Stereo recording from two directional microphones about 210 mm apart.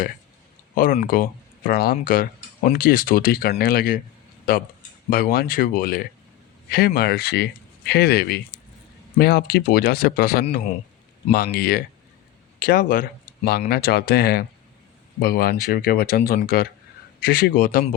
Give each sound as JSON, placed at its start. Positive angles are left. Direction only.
{"t": 0.8, "sound": "speech", "side_deg": 40}